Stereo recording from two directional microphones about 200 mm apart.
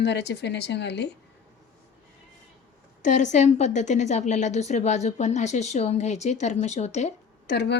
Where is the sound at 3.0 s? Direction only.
40° left (ahead or behind).